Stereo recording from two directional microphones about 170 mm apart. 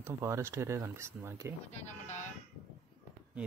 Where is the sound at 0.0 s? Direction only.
15° right (ahead or behind).